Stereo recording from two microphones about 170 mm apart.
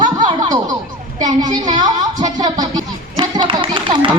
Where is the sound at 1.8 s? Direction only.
25° right (ahead or behind).